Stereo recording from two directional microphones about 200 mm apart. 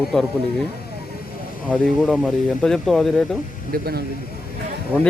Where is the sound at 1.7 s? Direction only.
Centre (ahead or behind).